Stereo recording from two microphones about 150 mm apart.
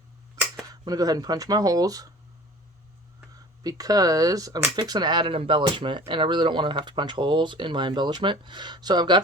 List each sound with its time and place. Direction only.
0.7 s speech: 25° right (ahead or behind)
3.6 s speech: 25° right (ahead or behind)